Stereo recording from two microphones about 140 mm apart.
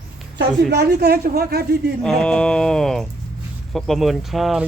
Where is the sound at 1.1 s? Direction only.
90° right.